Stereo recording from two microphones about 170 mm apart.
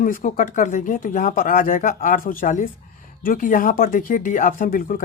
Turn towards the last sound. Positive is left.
turn(degrees=55)  # may be behind; listen again after turning